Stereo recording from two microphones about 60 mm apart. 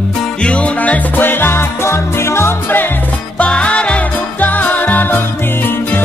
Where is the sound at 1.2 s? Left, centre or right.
Left.